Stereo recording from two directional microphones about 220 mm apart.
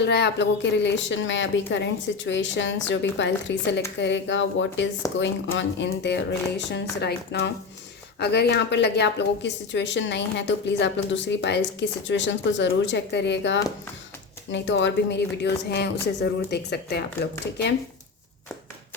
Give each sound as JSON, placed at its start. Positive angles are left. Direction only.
{"t": 0.0, "sound": "a woman's voice", "side_deg": 50}